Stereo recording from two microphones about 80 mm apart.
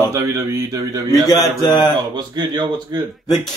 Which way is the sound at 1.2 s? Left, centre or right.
Left.